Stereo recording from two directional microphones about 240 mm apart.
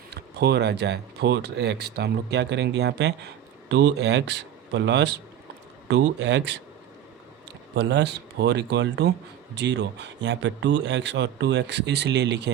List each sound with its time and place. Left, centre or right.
0.1 s speech: right
7.8 s speech: right